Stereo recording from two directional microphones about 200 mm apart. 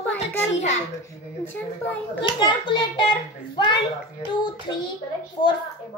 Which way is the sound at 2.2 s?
25° left (ahead or behind).